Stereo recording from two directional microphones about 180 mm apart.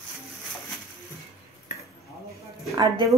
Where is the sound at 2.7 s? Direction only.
25° right (ahead or behind).